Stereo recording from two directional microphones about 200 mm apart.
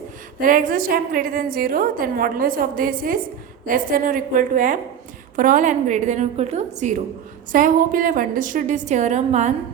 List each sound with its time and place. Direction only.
0.3 s a woman's voice: 45° right (ahead or behind)